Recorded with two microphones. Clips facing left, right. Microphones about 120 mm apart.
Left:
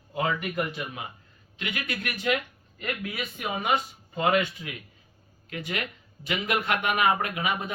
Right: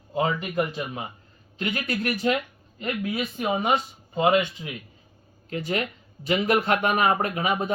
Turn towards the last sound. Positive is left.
turn(degrees=-35)  # may be behind; listen again after turning